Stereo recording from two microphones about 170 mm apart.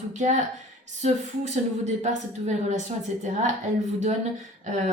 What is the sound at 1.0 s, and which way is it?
A woman's voice, 40° right (ahead or behind).